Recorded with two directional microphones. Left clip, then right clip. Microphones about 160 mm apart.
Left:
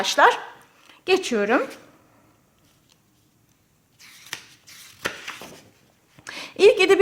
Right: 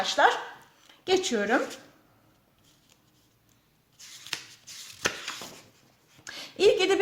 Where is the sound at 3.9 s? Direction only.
20° left (ahead or behind).